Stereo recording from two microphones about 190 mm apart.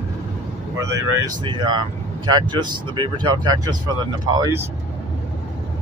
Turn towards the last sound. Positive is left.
turn(degrees=-20)  # may be behind; listen again after turning